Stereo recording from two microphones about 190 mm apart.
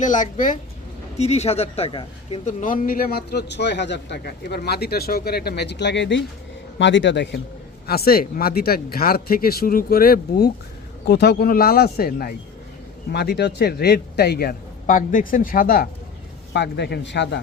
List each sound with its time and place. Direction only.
0.0 s speech: 40° left (ahead or behind)
2.4 s a man's voice: 40° left (ahead or behind)
16.5 s a man's voice: 60° left (ahead or behind)